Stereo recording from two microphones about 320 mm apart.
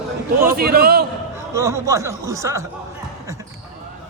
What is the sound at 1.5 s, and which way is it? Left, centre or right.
Speech, centre.